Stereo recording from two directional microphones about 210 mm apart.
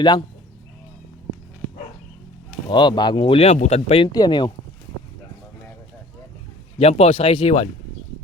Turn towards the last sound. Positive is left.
turn(degrees=25)  # may be behind; listen again after turning